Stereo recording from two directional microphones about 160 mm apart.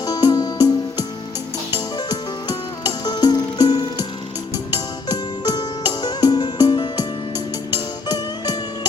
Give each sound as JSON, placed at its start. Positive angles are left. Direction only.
{"t": 0.0, "sound": "music", "side_deg": 25}
{"t": 2.0, "sound": "music", "side_deg": 25}
{"t": 5.0, "sound": "music", "side_deg": 25}